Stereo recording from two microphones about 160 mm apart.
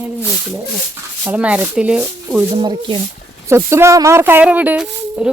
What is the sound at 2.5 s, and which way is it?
Speech, 30° right (ahead or behind).